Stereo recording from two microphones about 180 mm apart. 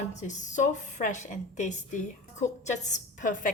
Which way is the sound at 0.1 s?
40° left (ahead or behind).